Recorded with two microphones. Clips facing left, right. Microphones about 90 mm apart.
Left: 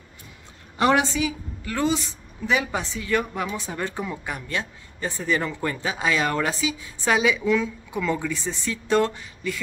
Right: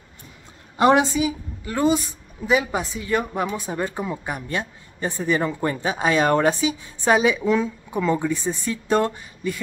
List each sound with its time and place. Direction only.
0.7 s a woman's voice: 20° right (ahead or behind)
8.2 s a woman's voice: 20° right (ahead or behind)